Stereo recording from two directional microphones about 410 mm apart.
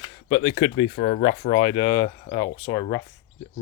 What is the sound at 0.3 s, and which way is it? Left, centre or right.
Speech, centre.